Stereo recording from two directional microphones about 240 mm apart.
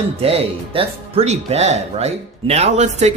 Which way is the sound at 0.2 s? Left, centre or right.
Right.